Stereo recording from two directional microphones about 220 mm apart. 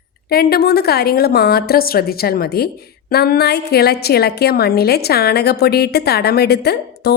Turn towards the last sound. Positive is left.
turn(degrees=45)  # may be behind; listen again after turning